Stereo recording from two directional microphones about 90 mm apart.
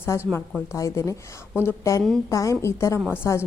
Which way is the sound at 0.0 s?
25° left (ahead or behind).